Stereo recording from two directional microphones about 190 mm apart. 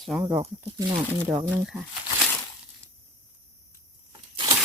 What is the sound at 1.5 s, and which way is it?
Crumpling, 5° right (ahead or behind).